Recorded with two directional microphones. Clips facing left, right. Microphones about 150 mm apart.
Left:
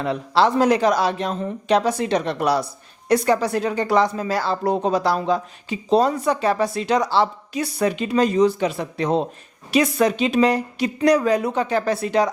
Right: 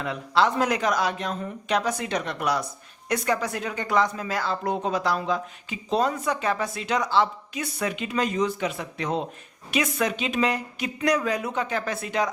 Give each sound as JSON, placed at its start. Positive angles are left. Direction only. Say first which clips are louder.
{"t": 0.0, "sound": "a woman's voice", "louder": "left 4 dB", "side_deg": 35}